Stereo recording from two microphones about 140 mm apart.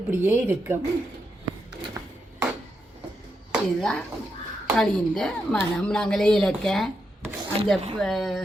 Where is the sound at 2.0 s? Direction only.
20° right (ahead or behind).